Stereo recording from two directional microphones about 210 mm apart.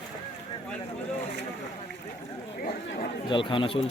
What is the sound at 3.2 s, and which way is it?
Speech, 25° left (ahead or behind).